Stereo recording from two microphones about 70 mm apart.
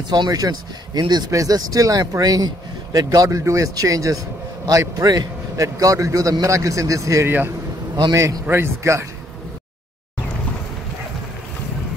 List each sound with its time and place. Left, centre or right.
0.1 s speech: right
1.3 s speech: right
3.3 s speech: right
7.2 s speech: right
7.9 s speech: right
8.5 s speech: right